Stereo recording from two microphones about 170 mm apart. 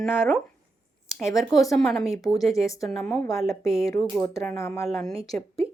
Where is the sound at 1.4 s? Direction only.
Centre (ahead or behind).